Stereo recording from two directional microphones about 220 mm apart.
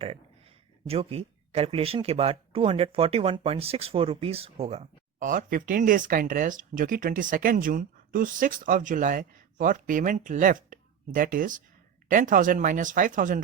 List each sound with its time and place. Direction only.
0.9 s speech: 25° right (ahead or behind)